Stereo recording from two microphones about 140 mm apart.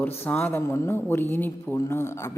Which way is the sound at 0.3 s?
15° left (ahead or behind).